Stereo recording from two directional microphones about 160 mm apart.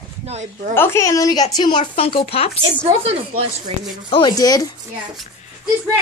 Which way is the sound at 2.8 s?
40° right (ahead or behind).